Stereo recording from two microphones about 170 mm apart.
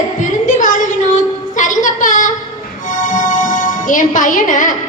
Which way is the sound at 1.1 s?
45° left (ahead or behind).